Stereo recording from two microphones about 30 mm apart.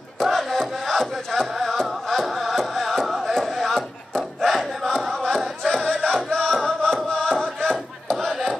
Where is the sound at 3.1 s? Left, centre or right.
Centre.